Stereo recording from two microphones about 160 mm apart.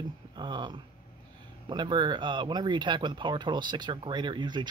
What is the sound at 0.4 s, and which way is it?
Speech, 30° right (ahead or behind).